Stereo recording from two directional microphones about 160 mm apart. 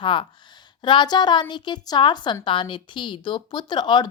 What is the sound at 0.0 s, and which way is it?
A woman's voice, 30° left (ahead or behind).